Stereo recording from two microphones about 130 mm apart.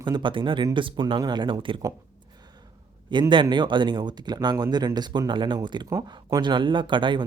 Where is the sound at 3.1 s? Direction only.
35° right (ahead or behind).